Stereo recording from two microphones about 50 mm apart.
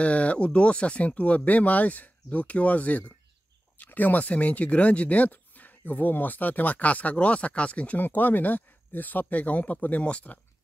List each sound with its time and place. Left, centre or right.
0.0 s speech: left
8.0 s speech: left